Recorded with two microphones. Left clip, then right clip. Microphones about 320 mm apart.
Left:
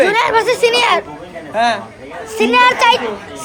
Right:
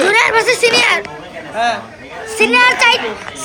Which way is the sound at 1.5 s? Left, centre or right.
Left.